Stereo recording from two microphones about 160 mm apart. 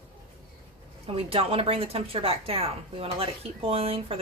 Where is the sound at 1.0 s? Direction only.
35° right (ahead or behind).